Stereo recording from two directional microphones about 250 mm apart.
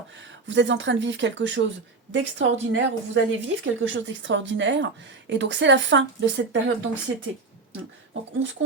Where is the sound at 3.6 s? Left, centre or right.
Right.